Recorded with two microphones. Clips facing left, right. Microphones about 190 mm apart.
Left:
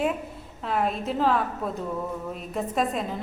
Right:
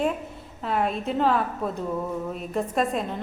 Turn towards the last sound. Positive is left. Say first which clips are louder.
# right 1 dB
turn(degrees=0)  # may be behind; listen again after turning